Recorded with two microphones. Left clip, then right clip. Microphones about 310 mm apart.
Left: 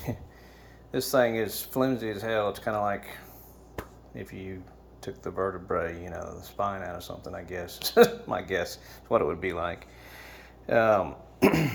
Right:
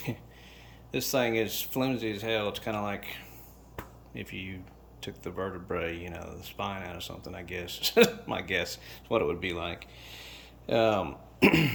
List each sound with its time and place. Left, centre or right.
0.9 s speech: centre
4.1 s speech: left
4.9 s speech: centre
7.9 s speech: centre
8.6 s speech: centre